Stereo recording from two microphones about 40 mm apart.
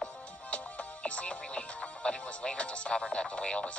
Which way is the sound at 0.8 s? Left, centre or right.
Left.